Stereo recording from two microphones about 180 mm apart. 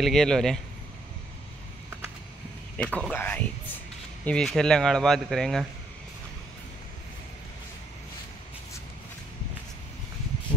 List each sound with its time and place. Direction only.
0.0 s a man's voice: centre (ahead or behind)
2.8 s speech: 10° left (ahead or behind)